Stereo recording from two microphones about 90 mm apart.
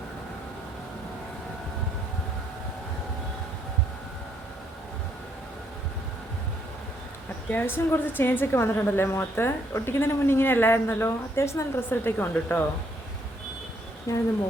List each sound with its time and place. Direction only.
7.5 s a woman's voice: 25° left (ahead or behind)
14.1 s speech: 35° left (ahead or behind)